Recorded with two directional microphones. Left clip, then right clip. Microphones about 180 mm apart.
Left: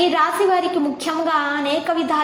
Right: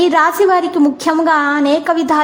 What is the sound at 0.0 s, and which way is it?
A woman's voice, 45° right (ahead or behind).